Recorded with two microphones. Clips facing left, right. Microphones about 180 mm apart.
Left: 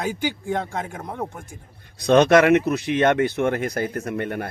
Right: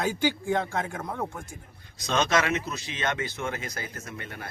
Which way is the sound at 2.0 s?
60° left (ahead or behind).